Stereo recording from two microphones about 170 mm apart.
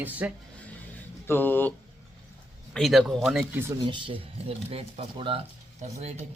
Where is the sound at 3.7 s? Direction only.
30° right (ahead or behind).